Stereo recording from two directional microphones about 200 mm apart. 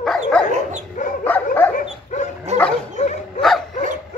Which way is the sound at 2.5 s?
35° right (ahead or behind).